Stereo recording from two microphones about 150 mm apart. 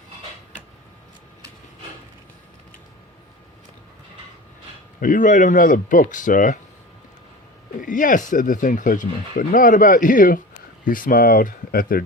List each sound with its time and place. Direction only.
4.9 s speech: 60° left (ahead or behind)
7.8 s speech: 65° left (ahead or behind); by 12.0 s 80° left